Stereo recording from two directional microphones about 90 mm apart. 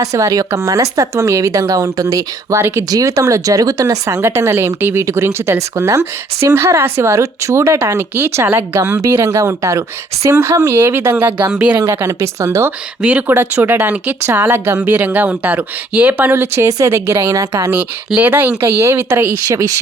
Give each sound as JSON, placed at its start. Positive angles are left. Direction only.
{"t": 0.0, "sound": "speech", "side_deg": -40}
{"t": 11.8, "sound": "speech", "side_deg": -30}
{"t": 13.0, "sound": "speech", "side_deg": -15}
{"t": 18.2, "sound": "speech", "side_deg": -20}
{"t": 19.5, "sound": "speech", "side_deg": -40}